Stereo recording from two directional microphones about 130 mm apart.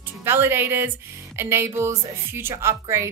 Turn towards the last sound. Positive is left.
turn(degrees=-20)  # may be behind; listen again after turning